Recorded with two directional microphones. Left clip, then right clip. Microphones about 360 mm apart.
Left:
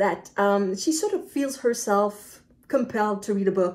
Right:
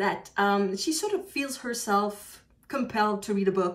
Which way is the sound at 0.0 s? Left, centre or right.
Centre.